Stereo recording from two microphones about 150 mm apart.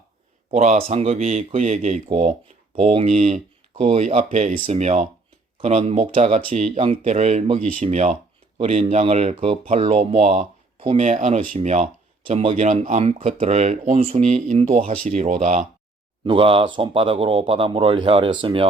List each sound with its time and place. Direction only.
0.5 s speech: 50° right (ahead or behind)
2.7 s speech: 40° right (ahead or behind)
4.5 s speech: 40° right (ahead or behind)
8.5 s speech: 40° right (ahead or behind)
12.3 s speech: 40° right (ahead or behind)
12.6 s speech: 50° right (ahead or behind)
16.2 s speech: 35° right (ahead or behind)